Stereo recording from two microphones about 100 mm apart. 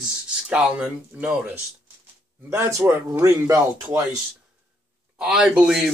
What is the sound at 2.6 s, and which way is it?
Speech, 30° right (ahead or behind).